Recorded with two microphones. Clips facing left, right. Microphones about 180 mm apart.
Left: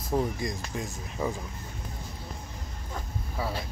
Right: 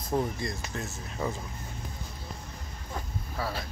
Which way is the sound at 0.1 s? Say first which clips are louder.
Left 1 dB; 10° left (ahead or behind).